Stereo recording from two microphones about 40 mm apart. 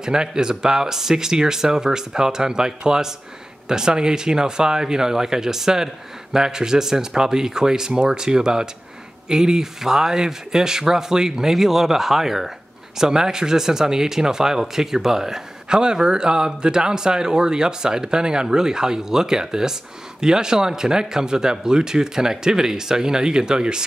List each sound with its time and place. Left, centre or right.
0.0 s speech: centre